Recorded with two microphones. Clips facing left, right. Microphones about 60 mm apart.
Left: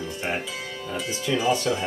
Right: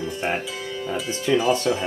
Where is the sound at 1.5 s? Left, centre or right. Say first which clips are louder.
Right 2 dB; right.